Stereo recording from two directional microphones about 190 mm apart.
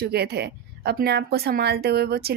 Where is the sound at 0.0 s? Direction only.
55° right (ahead or behind).